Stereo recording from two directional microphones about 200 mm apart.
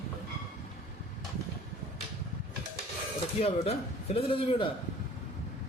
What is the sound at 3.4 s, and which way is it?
A man's voice, 30° left (ahead or behind).